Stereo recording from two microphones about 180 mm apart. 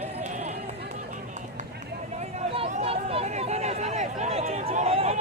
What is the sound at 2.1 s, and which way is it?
Chatter, 40° right (ahead or behind).